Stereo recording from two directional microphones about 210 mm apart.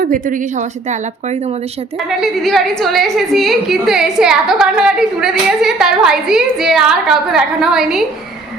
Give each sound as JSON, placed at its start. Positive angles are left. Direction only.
{"t": 0.0, "sound": "speech", "side_deg": -40}
{"t": 2.0, "sound": "a woman's voice", "side_deg": 0}